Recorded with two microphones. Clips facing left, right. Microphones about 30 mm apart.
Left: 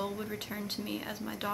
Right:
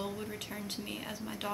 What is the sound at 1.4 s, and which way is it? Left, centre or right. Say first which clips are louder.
Speech: left 2 dB; left.